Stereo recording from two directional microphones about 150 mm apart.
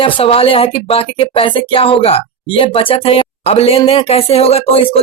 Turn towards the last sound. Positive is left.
turn(degrees=40)  # may be behind; listen again after turning